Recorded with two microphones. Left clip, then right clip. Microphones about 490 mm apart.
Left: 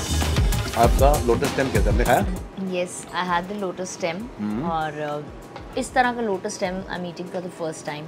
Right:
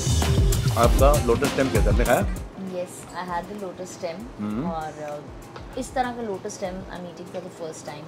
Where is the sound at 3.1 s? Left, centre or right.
Left.